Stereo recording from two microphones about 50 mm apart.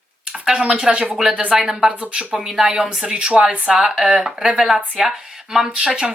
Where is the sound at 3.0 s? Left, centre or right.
Right.